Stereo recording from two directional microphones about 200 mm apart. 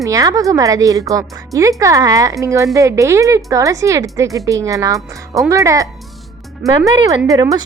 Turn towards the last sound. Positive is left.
turn(degrees=-15)  # may be behind; listen again after turning